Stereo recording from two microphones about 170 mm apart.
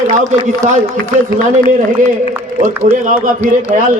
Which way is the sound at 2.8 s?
40° right (ahead or behind).